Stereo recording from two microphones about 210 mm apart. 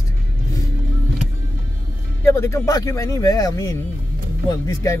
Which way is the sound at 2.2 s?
15° left (ahead or behind).